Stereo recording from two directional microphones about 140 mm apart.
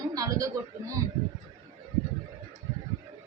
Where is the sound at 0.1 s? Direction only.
25° right (ahead or behind).